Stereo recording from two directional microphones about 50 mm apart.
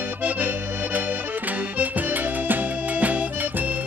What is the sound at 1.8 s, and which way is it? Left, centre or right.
Accordion, right.